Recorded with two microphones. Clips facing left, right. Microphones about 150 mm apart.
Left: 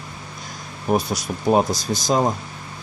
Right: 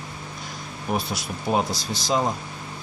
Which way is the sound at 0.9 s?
45° left (ahead or behind).